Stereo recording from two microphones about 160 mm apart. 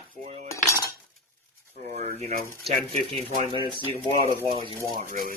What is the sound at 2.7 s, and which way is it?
Speech, 40° right (ahead or behind).